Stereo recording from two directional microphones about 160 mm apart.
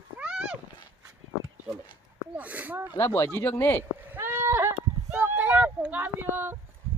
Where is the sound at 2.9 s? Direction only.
15° left (ahead or behind).